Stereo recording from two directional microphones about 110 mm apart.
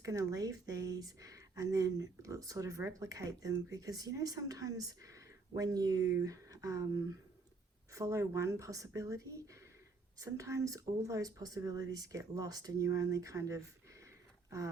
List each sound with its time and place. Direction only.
0.0 s speech: 30° right (ahead or behind)